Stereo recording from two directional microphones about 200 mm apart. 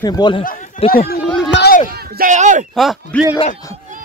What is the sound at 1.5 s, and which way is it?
Run, 55° left (ahead or behind).